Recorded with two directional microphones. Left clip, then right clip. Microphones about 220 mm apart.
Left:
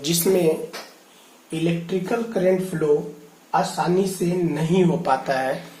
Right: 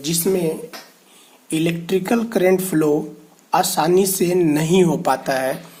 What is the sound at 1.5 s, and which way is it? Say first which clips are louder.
Speech: right 4 dB; 35° right (ahead or behind).